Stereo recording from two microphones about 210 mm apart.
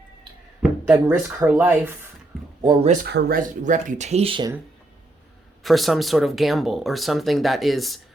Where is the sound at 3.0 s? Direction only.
45° right (ahead or behind); by 4.5 s 20° right (ahead or behind).